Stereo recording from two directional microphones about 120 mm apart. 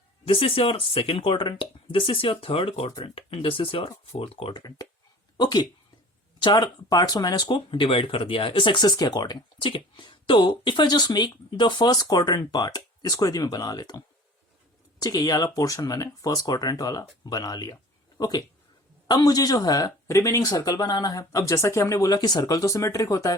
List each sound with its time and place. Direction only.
0.3 s speech: 50° left (ahead or behind)
4.5 s speech: 30° left (ahead or behind)
7.4 s speech: 45° left (ahead or behind); by 23.3 s 30° left (ahead or behind)